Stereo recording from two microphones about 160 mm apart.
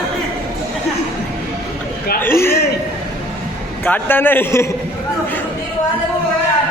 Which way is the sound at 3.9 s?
10° left (ahead or behind).